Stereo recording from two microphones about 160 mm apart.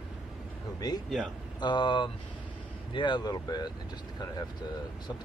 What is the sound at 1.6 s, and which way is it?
Speech, 30° left (ahead or behind).